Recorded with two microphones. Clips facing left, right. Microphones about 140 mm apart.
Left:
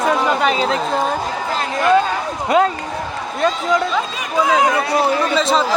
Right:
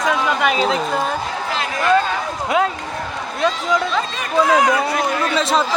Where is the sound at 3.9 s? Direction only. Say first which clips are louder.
Right 1 dB; 10° left (ahead or behind).